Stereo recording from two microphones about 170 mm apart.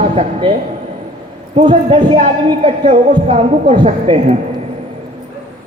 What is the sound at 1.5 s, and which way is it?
Speech, 25° right (ahead or behind).